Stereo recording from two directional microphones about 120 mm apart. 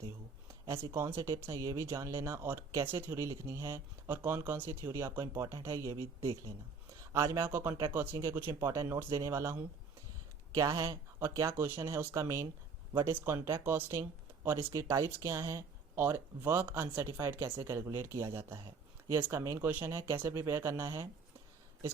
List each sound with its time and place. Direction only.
0.7 s speech: 45° right (ahead or behind)
0.9 s speech: 25° right (ahead or behind)